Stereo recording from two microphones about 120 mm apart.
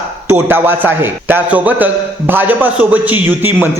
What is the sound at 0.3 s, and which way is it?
Speech, 15° right (ahead or behind).